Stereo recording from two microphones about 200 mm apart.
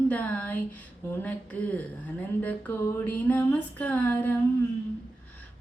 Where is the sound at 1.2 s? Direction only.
10° left (ahead or behind).